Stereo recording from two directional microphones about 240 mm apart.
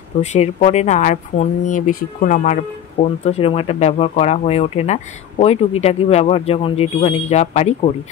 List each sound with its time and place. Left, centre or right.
0.2 s speech: left